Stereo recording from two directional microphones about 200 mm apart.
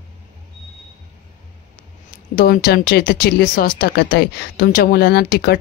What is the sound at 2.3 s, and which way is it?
Speech, 45° left (ahead or behind).